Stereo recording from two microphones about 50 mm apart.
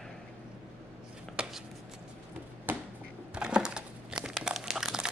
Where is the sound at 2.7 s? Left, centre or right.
Right.